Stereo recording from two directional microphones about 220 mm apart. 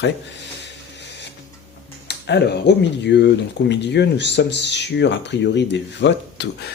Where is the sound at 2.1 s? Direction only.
50° left (ahead or behind).